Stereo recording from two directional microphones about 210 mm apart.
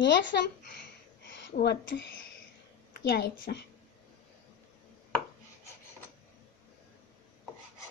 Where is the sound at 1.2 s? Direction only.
55° left (ahead or behind).